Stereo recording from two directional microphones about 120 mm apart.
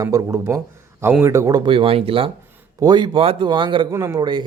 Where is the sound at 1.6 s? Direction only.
45° right (ahead or behind).